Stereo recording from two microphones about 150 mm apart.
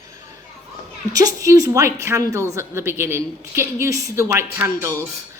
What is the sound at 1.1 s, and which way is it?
A woman's voice, 25° right (ahead or behind).